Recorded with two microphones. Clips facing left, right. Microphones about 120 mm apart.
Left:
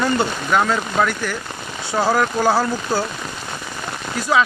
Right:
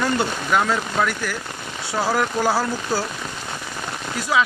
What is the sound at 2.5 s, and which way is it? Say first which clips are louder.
Speech: left 3 dB; 25° left (ahead or behind).